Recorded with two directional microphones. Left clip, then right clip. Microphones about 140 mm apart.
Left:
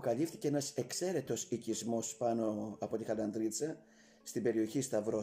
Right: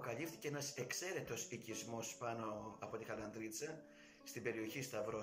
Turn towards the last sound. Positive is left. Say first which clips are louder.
# left 9 dB
turn(degrees=90)